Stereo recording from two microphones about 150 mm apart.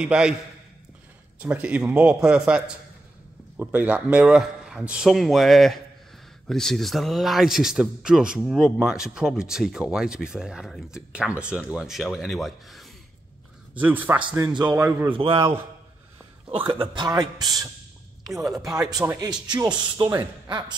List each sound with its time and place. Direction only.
0.0 s speech: 5° right (ahead or behind)
1.4 s speech: 10° right (ahead or behind)
13.7 s speech: 10° right (ahead or behind)
14.5 s speech: 30° right (ahead or behind)
14.8 s speech: 15° right (ahead or behind)
15.1 s a man's voice: 35° right (ahead or behind)
17.4 s speech: centre (ahead or behind)
19.0 s speech: 25° right (ahead or behind)